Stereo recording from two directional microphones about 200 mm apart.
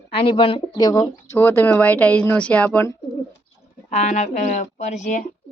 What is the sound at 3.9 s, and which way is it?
Speech, 35° left (ahead or behind).